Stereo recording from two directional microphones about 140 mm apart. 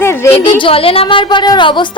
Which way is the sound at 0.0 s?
15° left (ahead or behind).